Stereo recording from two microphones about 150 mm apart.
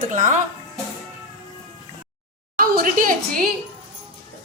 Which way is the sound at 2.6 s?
70° right (ahead or behind).